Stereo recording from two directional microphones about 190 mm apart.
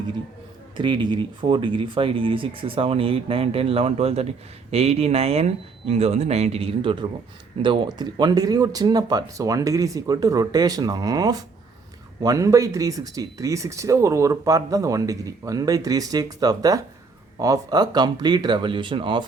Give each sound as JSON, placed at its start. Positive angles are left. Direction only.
{"t": 0.8, "sound": "speech", "side_deg": -25}